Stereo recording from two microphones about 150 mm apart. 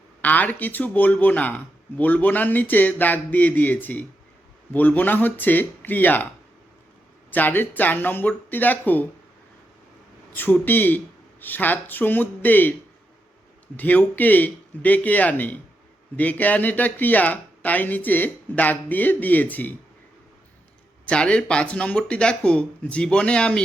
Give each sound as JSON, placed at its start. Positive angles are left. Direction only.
{"t": 0.2, "sound": "speech", "side_deg": 10}
{"t": 7.3, "sound": "speech", "side_deg": 10}
{"t": 10.3, "sound": "speech", "side_deg": 15}
{"t": 13.7, "sound": "speech", "side_deg": 10}
{"t": 21.0, "sound": "speech", "side_deg": 10}